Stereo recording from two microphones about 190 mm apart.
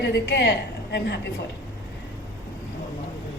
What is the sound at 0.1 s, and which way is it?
Speech, 60° left (ahead or behind).